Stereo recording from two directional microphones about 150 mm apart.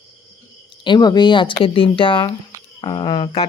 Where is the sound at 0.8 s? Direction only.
30° left (ahead or behind).